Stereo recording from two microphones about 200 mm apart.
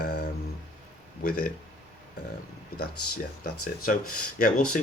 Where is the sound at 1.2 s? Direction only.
50° left (ahead or behind).